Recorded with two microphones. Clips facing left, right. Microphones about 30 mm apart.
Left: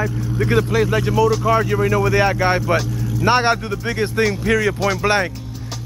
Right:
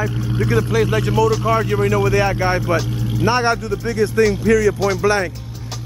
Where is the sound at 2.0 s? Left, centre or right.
Centre.